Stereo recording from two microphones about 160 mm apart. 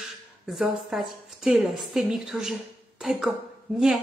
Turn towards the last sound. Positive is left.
turn(degrees=0)  # may be behind; listen again after turning